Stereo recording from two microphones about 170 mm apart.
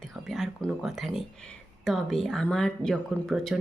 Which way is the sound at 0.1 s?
Centre (ahead or behind).